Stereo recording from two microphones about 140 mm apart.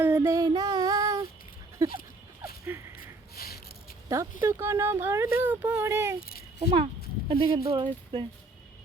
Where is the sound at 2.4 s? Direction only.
15° right (ahead or behind).